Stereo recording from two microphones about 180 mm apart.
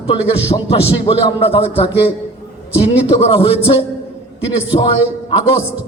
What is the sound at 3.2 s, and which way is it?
Speech, 30° left (ahead or behind).